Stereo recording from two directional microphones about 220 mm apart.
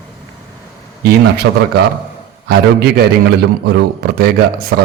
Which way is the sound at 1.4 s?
55° right (ahead or behind).